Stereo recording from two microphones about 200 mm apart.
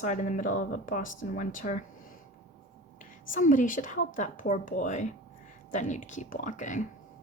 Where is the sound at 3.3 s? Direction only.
40° left (ahead or behind).